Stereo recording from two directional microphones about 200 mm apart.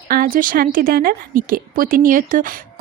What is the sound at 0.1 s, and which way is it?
Speech, 45° right (ahead or behind).